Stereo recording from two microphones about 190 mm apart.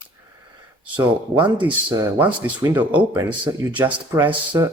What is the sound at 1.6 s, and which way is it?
Speech, 10° right (ahead or behind).